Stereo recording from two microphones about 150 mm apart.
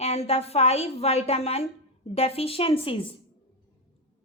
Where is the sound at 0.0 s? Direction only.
45° left (ahead or behind).